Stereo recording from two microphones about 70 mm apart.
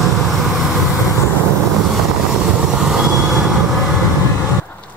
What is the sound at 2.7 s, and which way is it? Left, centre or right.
Train, centre.